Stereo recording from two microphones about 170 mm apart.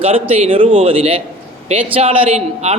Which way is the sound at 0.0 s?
35° right (ahead or behind).